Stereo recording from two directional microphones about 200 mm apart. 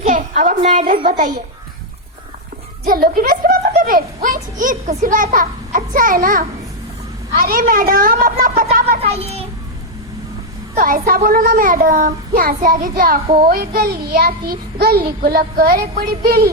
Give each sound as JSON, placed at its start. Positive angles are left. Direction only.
{"t": 0.0, "sound": "a sound", "side_deg": -40}
{"t": 1.0, "sound": "a child's voice", "side_deg": -40}
{"t": 2.8, "sound": "a child's voice", "side_deg": -45}
{"t": 9.0, "sound": "a child's voice", "side_deg": -30}
{"t": 10.8, "sound": "a child's voice", "side_deg": -45}
{"t": 13.2, "sound": "a child's voice", "side_deg": -30}
{"t": 13.5, "sound": "a child's voice", "side_deg": -50}